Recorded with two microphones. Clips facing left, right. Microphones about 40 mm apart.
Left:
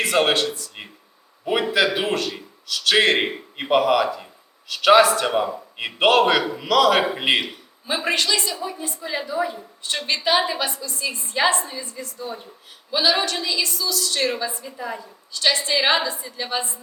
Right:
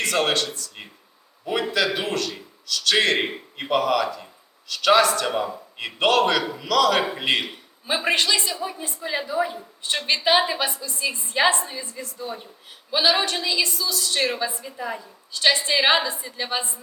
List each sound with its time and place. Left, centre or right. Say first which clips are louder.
0.0 s a man's voice: left 3 dB; centre
7.4 s a man's voice: even; centre
11.8 s a woman's voice: left 1 dB; centre
13.6 s a woman's voice: even; centre
14.6 s a woman's voice: even; centre